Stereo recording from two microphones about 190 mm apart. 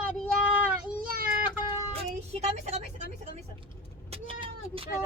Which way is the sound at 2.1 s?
35° right (ahead or behind).